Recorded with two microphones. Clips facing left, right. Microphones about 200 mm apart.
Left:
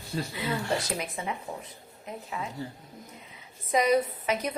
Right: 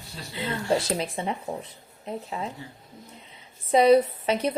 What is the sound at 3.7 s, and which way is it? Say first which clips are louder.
Speech: right 6 dB; 30° right (ahead or behind).